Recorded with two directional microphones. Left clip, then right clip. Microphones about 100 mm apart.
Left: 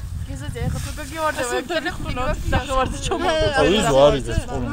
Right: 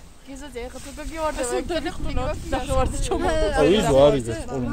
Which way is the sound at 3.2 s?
5° right (ahead or behind).